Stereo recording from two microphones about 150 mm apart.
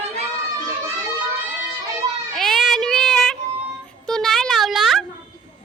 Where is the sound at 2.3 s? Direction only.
Centre (ahead or behind).